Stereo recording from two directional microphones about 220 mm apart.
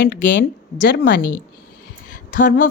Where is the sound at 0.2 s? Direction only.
55° left (ahead or behind).